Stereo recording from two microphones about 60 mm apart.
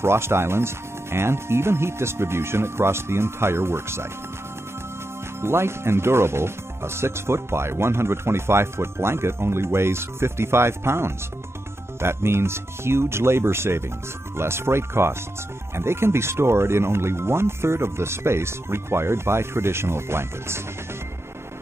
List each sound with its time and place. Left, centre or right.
0.0 s speech: right
5.4 s speech: right